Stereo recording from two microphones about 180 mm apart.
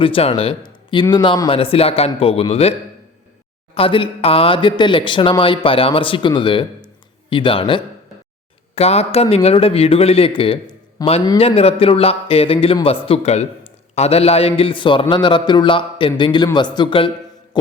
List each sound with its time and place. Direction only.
0.0 s speech: 30° left (ahead or behind)
3.8 s speech: 30° left (ahead or behind)